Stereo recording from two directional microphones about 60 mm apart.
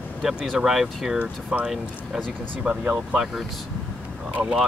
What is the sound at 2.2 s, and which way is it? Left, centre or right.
Speech, centre.